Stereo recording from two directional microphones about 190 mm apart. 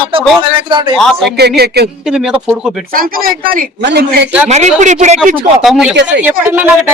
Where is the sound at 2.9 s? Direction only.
50° right (ahead or behind); by 4.3 s 65° right (ahead or behind).